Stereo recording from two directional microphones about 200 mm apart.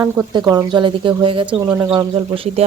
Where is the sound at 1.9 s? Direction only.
25° right (ahead or behind).